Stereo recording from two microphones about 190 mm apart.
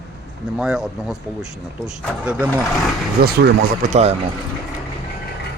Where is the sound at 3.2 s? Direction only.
55° right (ahead or behind).